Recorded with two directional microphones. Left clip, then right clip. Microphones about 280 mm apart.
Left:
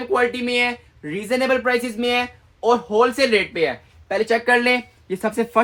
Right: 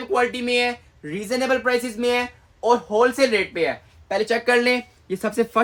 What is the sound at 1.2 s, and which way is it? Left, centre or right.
Speech, left.